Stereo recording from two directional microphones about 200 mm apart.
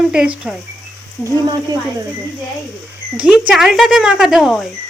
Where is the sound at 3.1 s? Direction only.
5° right (ahead or behind).